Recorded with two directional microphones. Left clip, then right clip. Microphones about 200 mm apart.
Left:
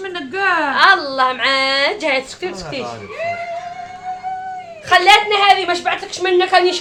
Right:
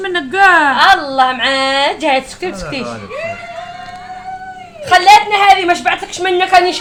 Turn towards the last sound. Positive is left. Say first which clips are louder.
# right 3 dB
turn(degrees=-15)  # may be behind; listen again after turning